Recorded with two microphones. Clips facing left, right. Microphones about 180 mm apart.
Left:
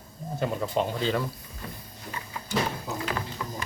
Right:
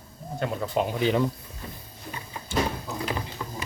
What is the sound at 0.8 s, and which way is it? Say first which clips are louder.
Speech: right 7 dB; 15° right (ahead or behind).